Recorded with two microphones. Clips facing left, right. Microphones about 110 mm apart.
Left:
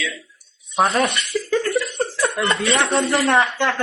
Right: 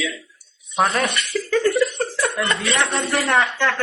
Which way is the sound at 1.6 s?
Centre (ahead or behind).